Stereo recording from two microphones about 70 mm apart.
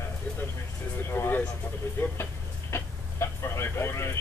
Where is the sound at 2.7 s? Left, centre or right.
Left.